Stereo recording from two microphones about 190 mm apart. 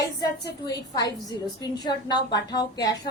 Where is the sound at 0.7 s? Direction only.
20° left (ahead or behind).